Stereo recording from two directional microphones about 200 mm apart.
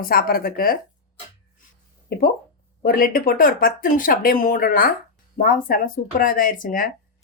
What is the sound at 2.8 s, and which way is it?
A woman's voice, 45° left (ahead or behind).